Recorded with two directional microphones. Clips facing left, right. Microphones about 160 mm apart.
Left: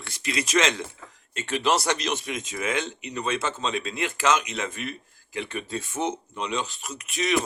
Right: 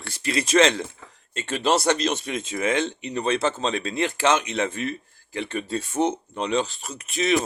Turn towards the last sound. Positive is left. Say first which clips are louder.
# right 4 dB
turn(degrees=-30)  # may be behind; listen again after turning